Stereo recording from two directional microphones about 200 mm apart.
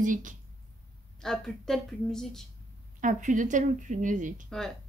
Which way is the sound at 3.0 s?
40° right (ahead or behind).